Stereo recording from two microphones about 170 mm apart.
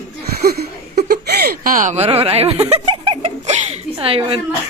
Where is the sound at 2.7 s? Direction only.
30° right (ahead or behind).